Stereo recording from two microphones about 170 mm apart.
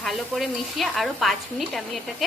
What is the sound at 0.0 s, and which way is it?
Speech, centre (ahead or behind).